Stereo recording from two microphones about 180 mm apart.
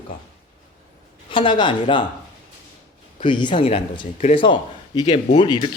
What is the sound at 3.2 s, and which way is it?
Speech, 25° left (ahead or behind).